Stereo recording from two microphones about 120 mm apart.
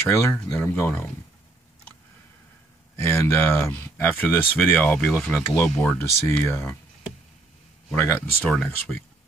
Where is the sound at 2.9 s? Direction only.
20° left (ahead or behind).